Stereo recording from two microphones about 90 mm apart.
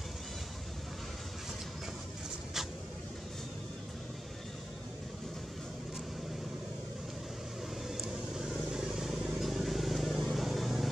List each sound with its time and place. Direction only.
8.0 s vehicle: 5° right (ahead or behind)